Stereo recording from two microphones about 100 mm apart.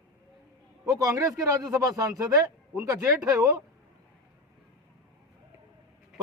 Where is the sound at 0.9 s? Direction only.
35° right (ahead or behind).